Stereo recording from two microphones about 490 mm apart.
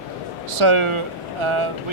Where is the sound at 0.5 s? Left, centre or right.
Right.